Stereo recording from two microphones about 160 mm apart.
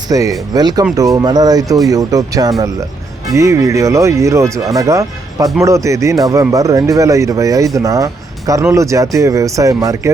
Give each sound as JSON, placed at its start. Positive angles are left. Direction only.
{"t": 0.1, "sound": "speech", "side_deg": -20}